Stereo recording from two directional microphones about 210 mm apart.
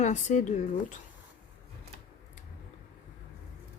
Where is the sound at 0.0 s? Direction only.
35° left (ahead or behind).